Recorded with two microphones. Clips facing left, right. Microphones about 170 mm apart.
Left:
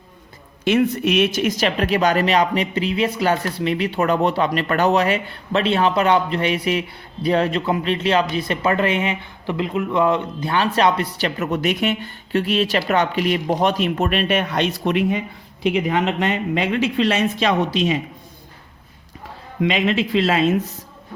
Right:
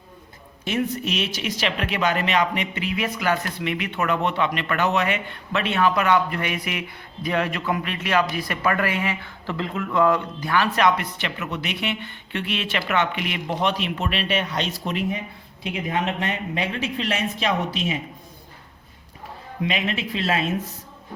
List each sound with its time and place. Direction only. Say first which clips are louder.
0.6 s speech: left 7 dB; 80° left; by 15.2 s 65° left (ahead or behind)
15.7 s speech: left 4 dB; 85° left
19.6 s speech: left 7 dB; 85° left